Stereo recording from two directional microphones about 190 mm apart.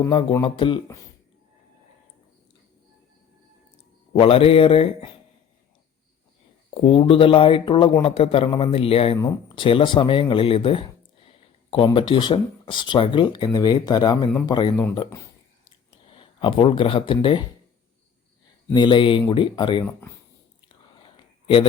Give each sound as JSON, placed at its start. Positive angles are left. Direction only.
{"t": 0.0, "sound": "speech", "side_deg": 25}
{"t": 4.1, "sound": "speech", "side_deg": 30}
{"t": 6.7, "sound": "speech", "side_deg": 25}
{"t": 16.0, "sound": "speech", "side_deg": 25}
{"t": 18.7, "sound": "speech", "side_deg": 25}
{"t": 19.8, "sound": "speech", "side_deg": 15}
{"t": 20.7, "sound": "whispering", "side_deg": 25}